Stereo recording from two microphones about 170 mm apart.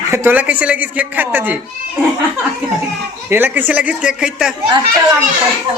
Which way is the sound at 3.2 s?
10° right (ahead or behind).